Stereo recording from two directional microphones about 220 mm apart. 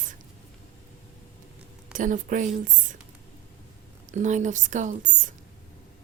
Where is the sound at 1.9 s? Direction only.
35° right (ahead or behind).